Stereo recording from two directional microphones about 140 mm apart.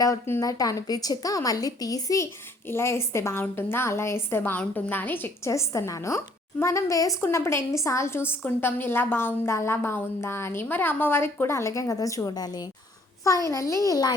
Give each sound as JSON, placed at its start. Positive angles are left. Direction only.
{"t": 0.0, "sound": "a woman's voice", "side_deg": 20}